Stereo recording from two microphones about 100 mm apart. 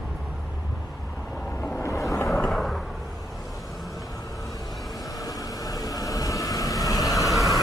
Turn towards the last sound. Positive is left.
turn(degrees=35)  # may be behind; listen again after turning